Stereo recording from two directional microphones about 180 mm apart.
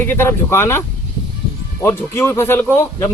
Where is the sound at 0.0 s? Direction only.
10° left (ahead or behind).